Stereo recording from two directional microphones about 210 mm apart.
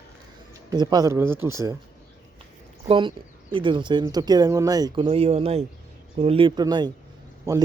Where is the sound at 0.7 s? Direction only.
20° right (ahead or behind).